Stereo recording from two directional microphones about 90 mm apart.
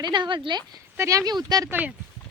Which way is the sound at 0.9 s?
35° right (ahead or behind).